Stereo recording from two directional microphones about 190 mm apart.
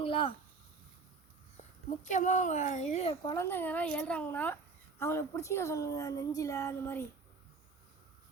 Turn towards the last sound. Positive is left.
turn(degrees=15)  # may be behind; listen again after turning